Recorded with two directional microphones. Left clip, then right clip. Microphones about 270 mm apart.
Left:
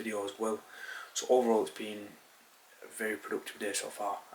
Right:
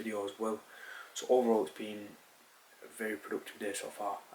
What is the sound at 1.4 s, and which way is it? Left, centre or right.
Speech, centre.